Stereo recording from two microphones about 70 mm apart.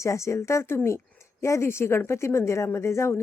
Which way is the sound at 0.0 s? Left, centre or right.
Left.